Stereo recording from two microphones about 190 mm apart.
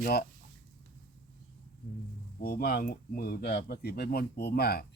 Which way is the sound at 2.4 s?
50° left (ahead or behind).